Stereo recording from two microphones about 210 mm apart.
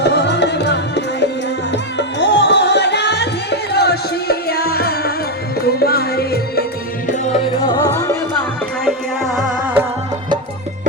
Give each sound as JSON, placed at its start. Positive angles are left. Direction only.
{"t": 0.0, "sound": "music", "side_deg": 55}
{"t": 7.1, "sound": "music", "side_deg": 30}
{"t": 8.8, "sound": "music", "side_deg": 0}